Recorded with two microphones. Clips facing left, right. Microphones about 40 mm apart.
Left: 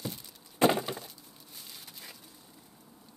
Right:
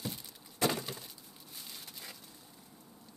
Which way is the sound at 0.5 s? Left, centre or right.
Left.